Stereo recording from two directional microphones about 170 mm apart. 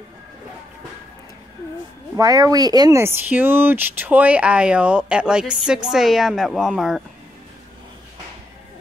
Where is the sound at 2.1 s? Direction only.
20° right (ahead or behind); by 7.0 s centre (ahead or behind).